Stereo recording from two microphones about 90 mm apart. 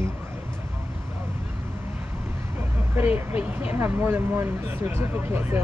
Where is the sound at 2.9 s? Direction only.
20° right (ahead or behind).